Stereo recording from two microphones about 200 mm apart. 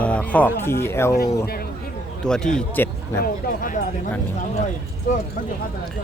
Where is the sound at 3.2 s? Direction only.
45° left (ahead or behind).